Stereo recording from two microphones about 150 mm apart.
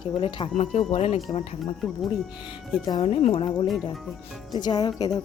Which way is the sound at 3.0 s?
45° left (ahead or behind).